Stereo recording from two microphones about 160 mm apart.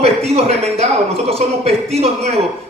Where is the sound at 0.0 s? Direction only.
40° right (ahead or behind).